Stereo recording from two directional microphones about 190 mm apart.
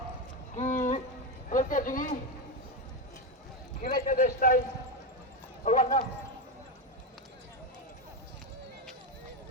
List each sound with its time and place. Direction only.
0.5 s a sound: 40° left (ahead or behind)
1.5 s a man's voice: 45° left (ahead or behind)
3.8 s a man's voice: 45° left (ahead or behind)
5.6 s clip-clop: 45° left (ahead or behind)